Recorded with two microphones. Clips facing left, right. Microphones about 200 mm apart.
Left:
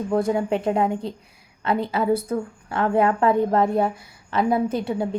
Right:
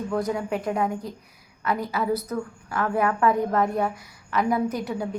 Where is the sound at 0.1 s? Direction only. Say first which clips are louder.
Left 6 dB; 25° left (ahead or behind).